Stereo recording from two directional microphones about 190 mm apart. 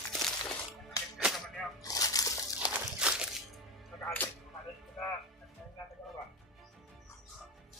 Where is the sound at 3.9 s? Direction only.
10° left (ahead or behind).